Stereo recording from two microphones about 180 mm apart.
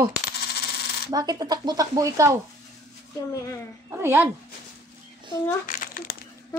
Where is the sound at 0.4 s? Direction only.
60° left (ahead or behind).